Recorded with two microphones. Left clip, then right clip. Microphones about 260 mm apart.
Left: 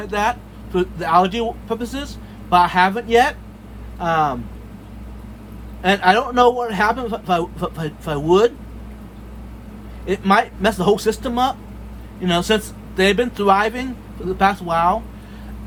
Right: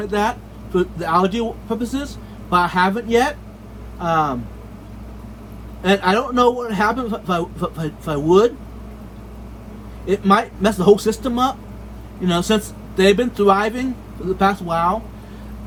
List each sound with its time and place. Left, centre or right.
0.0 s speech: left
5.8 s speech: left
10.1 s speech: left